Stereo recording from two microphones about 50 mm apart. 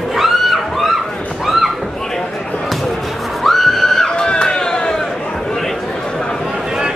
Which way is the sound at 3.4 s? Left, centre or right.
Centre.